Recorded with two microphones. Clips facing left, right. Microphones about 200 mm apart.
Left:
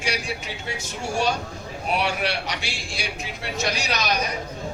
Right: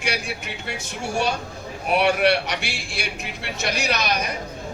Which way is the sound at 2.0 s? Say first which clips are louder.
Right 9 dB; 60° right (ahead or behind).